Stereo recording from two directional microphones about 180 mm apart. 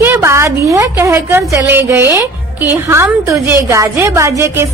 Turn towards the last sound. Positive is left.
turn(degrees=-15)  # may be behind; listen again after turning